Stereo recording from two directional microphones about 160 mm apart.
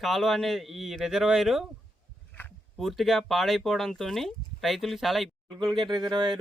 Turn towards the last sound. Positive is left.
turn(degrees=-25)  # may be behind; listen again after turning